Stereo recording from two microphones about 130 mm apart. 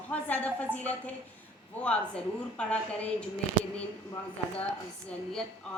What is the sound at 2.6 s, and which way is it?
Music, 10° left (ahead or behind).